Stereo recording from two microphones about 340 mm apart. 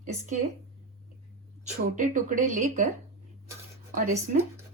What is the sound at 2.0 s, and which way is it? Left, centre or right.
Speech, right.